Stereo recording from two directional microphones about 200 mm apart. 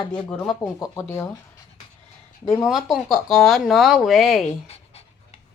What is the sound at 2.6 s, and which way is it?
Speech, centre (ahead or behind).